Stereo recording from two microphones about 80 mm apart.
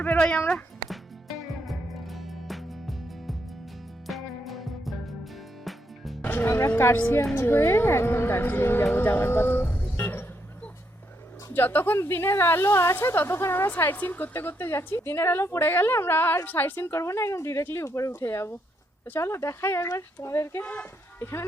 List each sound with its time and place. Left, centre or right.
0.0 s speech: centre
1.6 s music: centre
4.0 s music: centre
6.2 s music: left
7.3 s a woman's voice: left
16.8 s speech: left